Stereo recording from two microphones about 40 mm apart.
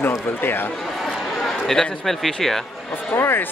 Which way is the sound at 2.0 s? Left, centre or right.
Centre.